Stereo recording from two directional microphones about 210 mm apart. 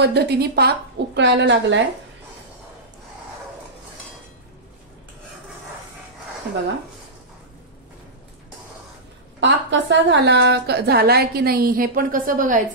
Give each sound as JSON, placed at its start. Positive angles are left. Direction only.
{"t": 0.0, "sound": "a woman's voice", "side_deg": -50}
{"t": 9.4, "sound": "a woman's voice", "side_deg": -60}